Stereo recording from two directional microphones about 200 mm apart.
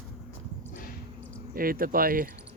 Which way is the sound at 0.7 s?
45° left (ahead or behind).